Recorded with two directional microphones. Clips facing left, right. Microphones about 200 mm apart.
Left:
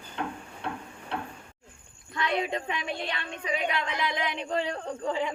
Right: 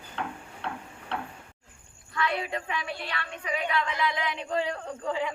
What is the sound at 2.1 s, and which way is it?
Speech, 25° left (ahead or behind).